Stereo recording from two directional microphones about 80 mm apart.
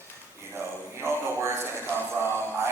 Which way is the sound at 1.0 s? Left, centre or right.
Right.